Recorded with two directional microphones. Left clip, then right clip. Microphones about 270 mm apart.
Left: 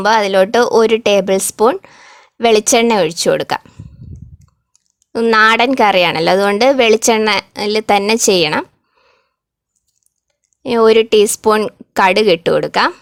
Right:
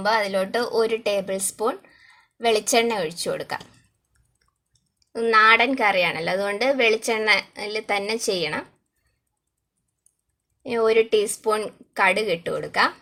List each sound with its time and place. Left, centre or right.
0.1 s a woman's voice: left
5.1 s a woman's voice: left
10.6 s a woman's voice: left